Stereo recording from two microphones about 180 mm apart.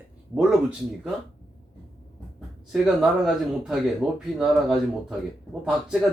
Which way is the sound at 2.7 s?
Centre (ahead or behind).